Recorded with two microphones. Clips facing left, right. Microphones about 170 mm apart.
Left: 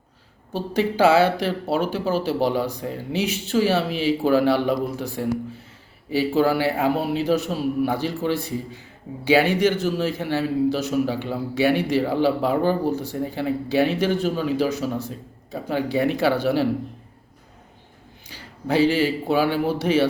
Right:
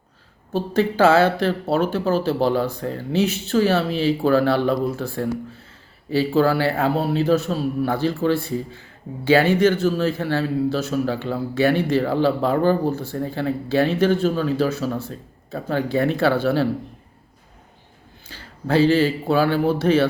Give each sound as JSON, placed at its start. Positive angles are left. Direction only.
{"t": 0.5, "sound": "a man's voice", "side_deg": 10}
{"t": 18.3, "sound": "a man's voice", "side_deg": 15}